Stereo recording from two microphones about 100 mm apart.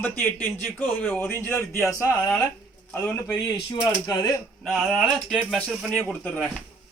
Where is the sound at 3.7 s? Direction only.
45° left (ahead or behind).